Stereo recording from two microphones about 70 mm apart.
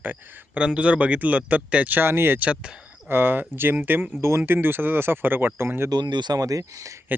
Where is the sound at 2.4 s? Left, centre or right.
Centre.